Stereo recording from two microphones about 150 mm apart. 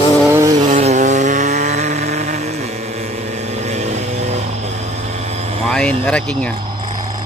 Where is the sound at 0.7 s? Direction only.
55° right (ahead or behind).